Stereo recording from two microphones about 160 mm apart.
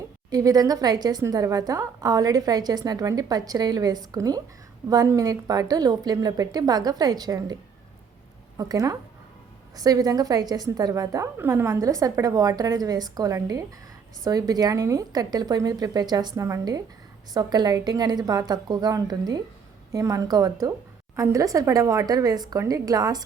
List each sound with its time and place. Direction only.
0.3 s a woman's voice: 25° right (ahead or behind)